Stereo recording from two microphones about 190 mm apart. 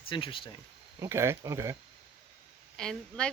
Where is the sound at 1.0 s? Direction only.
15° right (ahead or behind).